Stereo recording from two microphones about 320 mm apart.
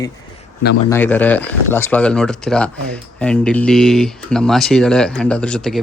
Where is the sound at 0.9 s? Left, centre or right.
Centre.